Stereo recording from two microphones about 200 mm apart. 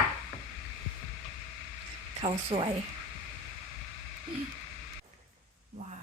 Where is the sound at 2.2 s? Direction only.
25° right (ahead or behind).